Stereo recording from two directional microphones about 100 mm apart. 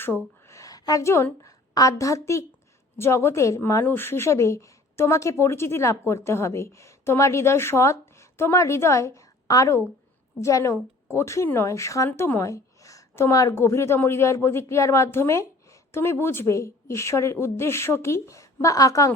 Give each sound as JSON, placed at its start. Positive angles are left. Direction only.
{"t": 0.0, "sound": "a woman's voice", "side_deg": 25}